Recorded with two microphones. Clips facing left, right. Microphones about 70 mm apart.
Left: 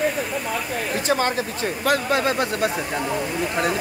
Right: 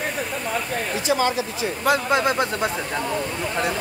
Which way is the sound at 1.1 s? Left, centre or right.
Left.